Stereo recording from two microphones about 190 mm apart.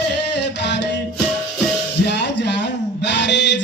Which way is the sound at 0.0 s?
65° left (ahead or behind).